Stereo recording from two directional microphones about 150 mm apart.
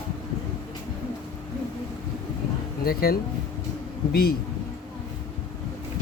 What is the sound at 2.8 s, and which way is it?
Speech, 90° left.